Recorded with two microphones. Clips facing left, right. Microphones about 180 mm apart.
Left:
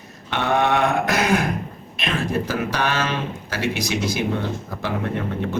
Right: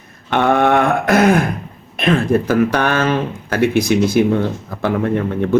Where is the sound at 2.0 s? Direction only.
55° right (ahead or behind).